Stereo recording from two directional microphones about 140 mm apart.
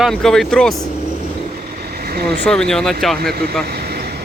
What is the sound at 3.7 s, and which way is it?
Vehicle, 90° right.